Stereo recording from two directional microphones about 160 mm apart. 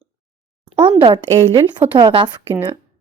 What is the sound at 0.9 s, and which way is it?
A woman's voice, 30° right (ahead or behind).